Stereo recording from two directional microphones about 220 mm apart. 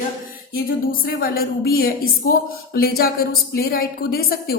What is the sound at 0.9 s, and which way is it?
A woman's voice, 40° left (ahead or behind).